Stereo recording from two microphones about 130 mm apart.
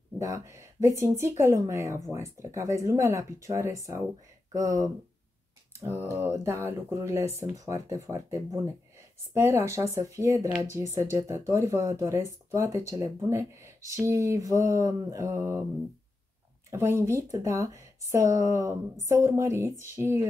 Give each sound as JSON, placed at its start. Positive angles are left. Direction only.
{"t": 0.2, "sound": "speech", "side_deg": -25}
{"t": 16.7, "sound": "speech", "side_deg": -20}